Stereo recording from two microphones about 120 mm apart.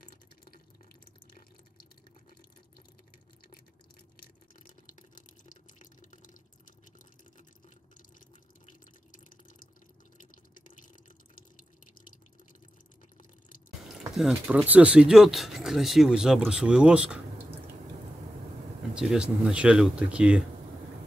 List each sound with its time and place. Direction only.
5.5 s drip: 90° left
14.5 s speech: 15° right (ahead or behind)
18.9 s speech: 5° right (ahead or behind)